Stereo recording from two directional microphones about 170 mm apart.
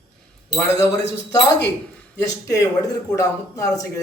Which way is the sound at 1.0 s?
90° left.